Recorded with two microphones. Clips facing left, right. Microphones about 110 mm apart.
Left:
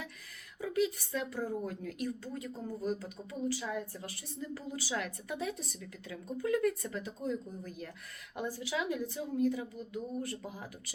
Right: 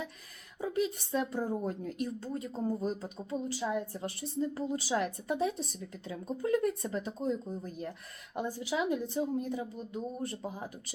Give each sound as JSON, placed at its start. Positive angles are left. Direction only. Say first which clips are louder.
{"t": 0.6, "sound": "a woman's voice", "louder": "even", "side_deg": -25}